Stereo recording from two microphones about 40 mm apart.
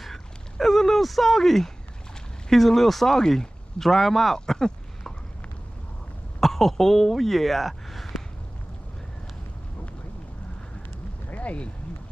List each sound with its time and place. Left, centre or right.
0.0 s speech: centre
6.4 s speech: centre
11.2 s a sound: left